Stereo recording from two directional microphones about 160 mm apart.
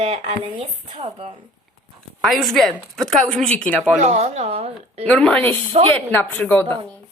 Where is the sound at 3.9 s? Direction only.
45° right (ahead or behind).